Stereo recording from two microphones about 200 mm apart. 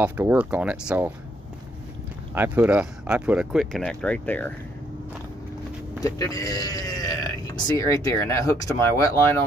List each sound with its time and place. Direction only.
0.0 s speech: 10° right (ahead or behind)
2.3 s speech: 10° right (ahead or behind); by 4.6 s 10° left (ahead or behind)
5.9 s speech: 15° left (ahead or behind)